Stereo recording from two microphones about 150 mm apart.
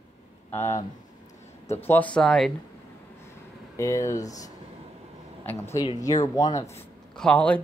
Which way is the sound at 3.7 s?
20° left (ahead or behind).